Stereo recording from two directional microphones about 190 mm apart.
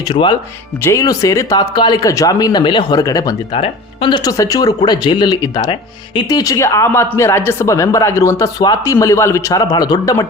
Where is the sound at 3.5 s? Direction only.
30° left (ahead or behind).